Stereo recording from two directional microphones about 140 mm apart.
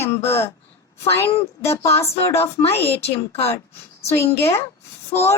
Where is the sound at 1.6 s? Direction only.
20° left (ahead or behind).